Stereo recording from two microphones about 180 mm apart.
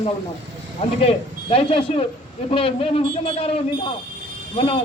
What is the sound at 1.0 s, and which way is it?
Speech, 30° left (ahead or behind).